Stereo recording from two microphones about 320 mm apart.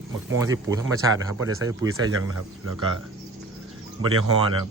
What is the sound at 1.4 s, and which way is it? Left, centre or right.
Speech, right.